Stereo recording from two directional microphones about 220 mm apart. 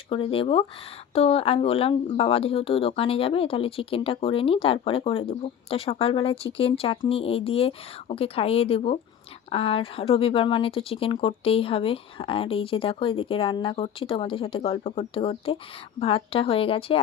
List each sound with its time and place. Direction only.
0.1 s speech: 25° left (ahead or behind)